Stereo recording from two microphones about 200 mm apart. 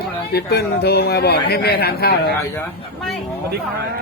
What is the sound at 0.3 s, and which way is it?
A man's voice, 55° left (ahead or behind).